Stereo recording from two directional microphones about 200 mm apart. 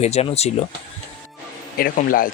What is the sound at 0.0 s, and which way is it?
Speech, 30° left (ahead or behind).